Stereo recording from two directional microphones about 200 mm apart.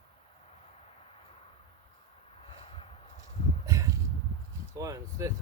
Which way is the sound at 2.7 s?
30° left (ahead or behind).